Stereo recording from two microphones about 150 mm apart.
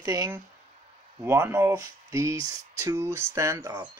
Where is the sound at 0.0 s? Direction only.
20° right (ahead or behind).